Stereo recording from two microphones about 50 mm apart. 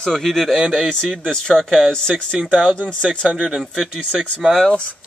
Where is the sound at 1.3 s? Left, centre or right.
Centre.